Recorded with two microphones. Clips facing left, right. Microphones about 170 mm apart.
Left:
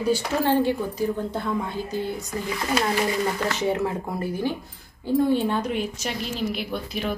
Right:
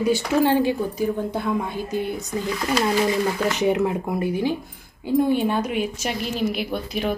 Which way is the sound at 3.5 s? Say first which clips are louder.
Right 4 dB; 15° right (ahead or behind).